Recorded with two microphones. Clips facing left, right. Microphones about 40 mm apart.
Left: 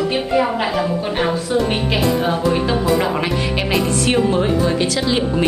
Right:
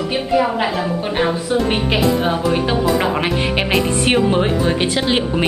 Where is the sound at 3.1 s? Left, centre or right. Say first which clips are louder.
Right 2 dB; right.